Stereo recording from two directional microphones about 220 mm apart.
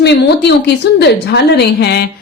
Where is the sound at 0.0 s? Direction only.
50° left (ahead or behind).